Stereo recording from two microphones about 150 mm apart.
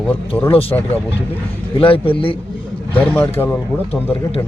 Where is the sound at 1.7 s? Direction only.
35° left (ahead or behind).